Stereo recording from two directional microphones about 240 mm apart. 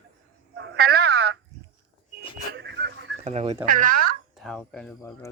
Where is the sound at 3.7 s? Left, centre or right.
Right.